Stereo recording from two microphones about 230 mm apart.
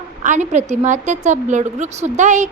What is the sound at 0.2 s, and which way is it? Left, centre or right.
A woman's voice, right.